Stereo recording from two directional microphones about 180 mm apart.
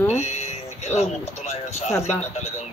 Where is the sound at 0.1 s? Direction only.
40° left (ahead or behind).